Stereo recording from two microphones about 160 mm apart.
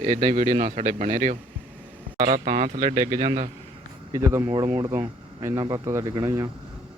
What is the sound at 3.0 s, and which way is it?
Speech, 30° right (ahead or behind).